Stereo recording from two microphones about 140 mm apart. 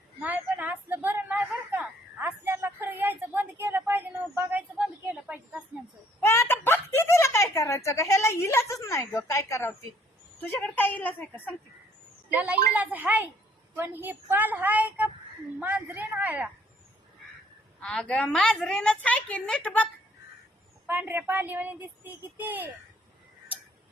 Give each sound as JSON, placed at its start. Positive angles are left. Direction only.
{"t": 0.2, "sound": "a sound", "side_deg": -10}
{"t": 6.2, "sound": "a sound", "side_deg": 15}
{"t": 10.4, "sound": "a woman's voice", "side_deg": 15}
{"t": 12.3, "sound": "a woman's voice", "side_deg": -10}
{"t": 17.7, "sound": "a woman's voice", "side_deg": 10}
{"t": 20.8, "sound": "a woman's voice", "side_deg": -15}